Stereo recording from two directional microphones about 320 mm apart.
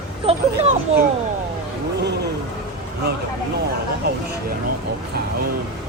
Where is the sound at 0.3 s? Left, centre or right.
Centre.